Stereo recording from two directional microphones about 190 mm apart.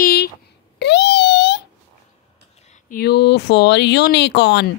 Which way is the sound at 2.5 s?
35° left (ahead or behind).